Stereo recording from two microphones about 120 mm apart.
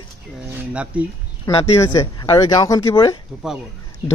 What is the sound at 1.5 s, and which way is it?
Speech, 55° left (ahead or behind).